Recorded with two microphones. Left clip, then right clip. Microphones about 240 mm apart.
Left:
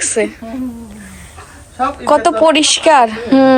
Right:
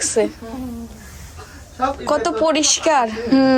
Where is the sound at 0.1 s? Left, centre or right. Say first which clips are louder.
Left 1 dB; centre.